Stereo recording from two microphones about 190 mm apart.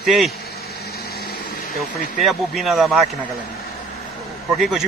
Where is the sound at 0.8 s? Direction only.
55° left (ahead or behind).